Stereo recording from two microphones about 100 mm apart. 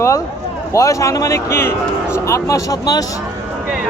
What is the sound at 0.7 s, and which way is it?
Speech, 30° left (ahead or behind).